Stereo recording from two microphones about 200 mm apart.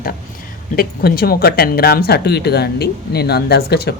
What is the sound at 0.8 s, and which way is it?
Speech, 50° left (ahead or behind).